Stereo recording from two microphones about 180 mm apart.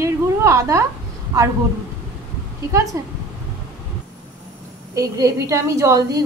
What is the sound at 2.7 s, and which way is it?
Speech, 20° right (ahead or behind).